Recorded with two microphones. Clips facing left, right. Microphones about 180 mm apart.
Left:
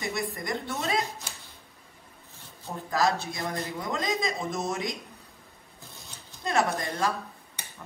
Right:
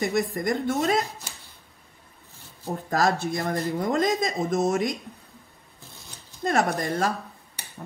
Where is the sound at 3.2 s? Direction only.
60° right (ahead or behind).